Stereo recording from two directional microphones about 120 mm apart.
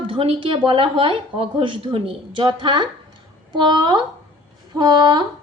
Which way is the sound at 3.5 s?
40° right (ahead or behind).